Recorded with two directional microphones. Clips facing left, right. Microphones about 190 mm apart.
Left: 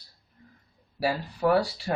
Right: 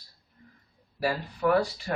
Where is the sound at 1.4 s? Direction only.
35° left (ahead or behind).